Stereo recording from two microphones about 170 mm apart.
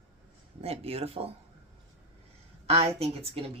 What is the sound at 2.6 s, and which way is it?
Speech, 35° right (ahead or behind).